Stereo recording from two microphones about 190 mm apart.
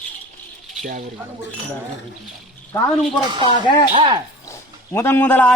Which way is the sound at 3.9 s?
25° right (ahead or behind).